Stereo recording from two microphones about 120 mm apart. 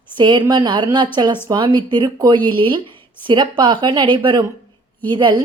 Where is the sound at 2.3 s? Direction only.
15° left (ahead or behind).